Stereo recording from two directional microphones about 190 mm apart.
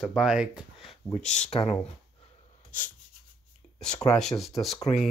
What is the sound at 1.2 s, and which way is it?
Speech, 40° left (ahead or behind).